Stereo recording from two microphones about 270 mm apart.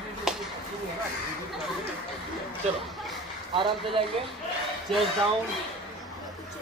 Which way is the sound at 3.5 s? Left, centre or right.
Centre.